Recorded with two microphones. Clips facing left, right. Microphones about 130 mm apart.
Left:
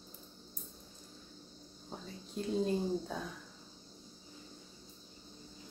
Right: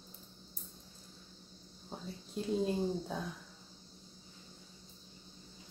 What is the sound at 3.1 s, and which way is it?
Speech, centre (ahead or behind).